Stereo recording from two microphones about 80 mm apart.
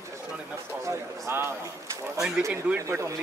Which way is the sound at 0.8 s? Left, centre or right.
Right.